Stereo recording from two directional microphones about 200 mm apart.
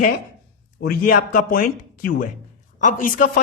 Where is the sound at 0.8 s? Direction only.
45° left (ahead or behind).